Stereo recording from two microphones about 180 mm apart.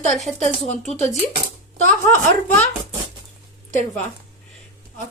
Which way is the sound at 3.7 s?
45° left (ahead or behind).